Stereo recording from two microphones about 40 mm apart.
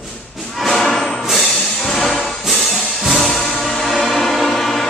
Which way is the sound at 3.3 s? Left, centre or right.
Centre.